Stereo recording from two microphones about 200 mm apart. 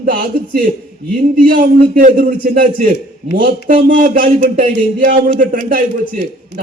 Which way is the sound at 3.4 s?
40° right (ahead or behind).